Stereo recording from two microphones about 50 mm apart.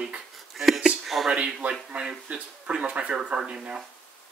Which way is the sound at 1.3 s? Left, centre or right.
Right.